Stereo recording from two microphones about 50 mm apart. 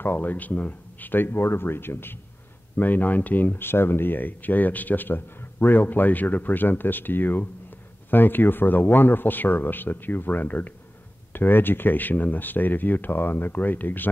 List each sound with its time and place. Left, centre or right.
0.0 s speech: left
2.8 s speech: left